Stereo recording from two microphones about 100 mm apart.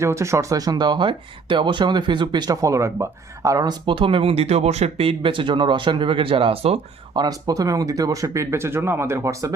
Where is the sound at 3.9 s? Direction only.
60° right (ahead or behind); by 6.8 s 75° right (ahead or behind).